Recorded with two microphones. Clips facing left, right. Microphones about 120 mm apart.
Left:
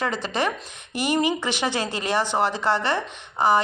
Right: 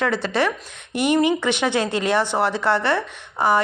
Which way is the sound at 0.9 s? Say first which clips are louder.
Right 4 dB; 60° right (ahead or behind).